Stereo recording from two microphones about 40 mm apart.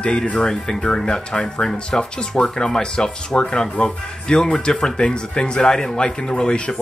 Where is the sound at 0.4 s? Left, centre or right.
Centre.